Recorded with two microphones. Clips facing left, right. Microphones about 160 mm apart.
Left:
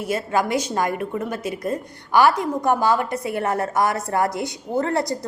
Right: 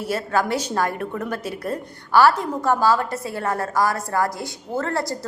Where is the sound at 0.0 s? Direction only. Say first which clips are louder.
Even; 10° left (ahead or behind).